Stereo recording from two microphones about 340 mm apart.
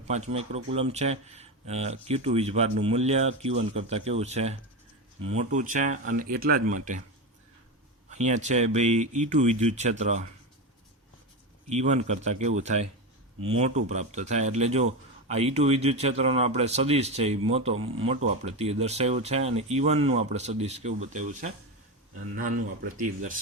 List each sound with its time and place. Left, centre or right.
0.1 s speech: centre
8.2 s speech: right
11.7 s speech: centre